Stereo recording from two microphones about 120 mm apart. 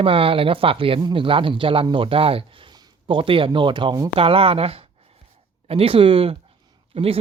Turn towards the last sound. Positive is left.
turn(degrees=-55)  # may be behind; listen again after turning